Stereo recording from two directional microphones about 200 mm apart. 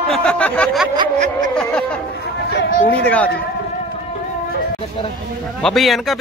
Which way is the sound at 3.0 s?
5° left (ahead or behind).